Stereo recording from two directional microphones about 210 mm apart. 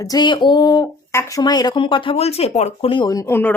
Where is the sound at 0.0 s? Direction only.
20° left (ahead or behind).